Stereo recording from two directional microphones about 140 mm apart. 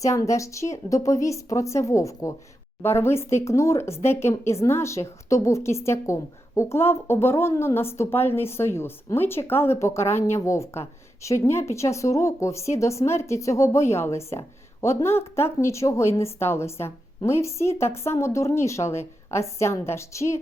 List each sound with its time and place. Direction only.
0.0 s a woman's voice: 25° left (ahead or behind)